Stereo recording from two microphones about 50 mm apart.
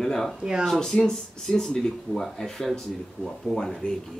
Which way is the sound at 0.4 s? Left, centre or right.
Centre.